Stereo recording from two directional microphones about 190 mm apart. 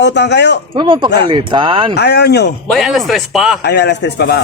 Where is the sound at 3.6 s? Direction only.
65° left (ahead or behind).